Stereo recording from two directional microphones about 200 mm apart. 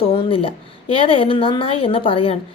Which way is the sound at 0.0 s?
25° left (ahead or behind).